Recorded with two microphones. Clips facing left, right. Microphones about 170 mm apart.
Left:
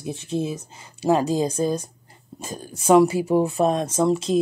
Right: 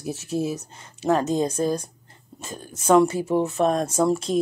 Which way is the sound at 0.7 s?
10° left (ahead or behind).